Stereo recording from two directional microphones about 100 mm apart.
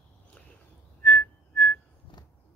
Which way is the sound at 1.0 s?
5° left (ahead or behind).